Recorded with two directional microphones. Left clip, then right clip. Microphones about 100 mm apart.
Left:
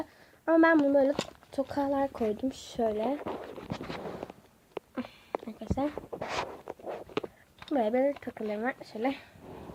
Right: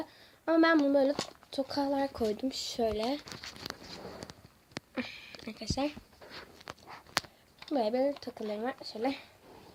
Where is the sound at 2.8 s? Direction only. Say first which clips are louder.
Left 3 dB; 25° right (ahead or behind).